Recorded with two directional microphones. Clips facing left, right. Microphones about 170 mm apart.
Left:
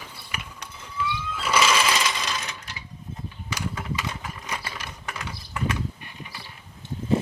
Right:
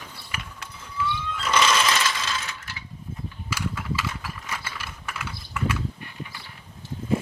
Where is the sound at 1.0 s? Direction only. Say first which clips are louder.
Right 1 dB; 5° left (ahead or behind).